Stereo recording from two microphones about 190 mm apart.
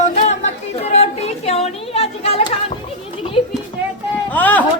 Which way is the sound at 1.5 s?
35° left (ahead or behind).